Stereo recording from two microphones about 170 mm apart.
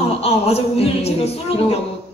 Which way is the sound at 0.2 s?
35° left (ahead or behind).